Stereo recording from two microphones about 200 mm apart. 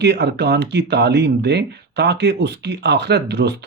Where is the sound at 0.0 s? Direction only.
55° right (ahead or behind).